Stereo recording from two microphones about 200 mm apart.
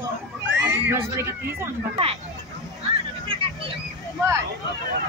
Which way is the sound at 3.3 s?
25° right (ahead or behind).